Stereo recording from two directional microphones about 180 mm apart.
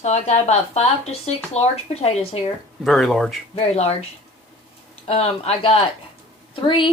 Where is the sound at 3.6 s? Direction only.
35° left (ahead or behind).